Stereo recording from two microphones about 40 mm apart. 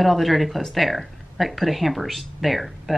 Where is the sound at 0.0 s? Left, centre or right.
Centre.